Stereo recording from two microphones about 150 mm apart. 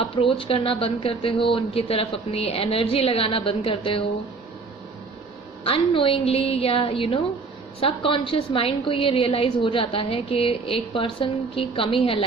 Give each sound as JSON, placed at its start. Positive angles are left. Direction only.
{"t": 0.0, "sound": "a woman's voice", "side_deg": 35}
{"t": 5.6, "sound": "a woman's voice", "side_deg": 40}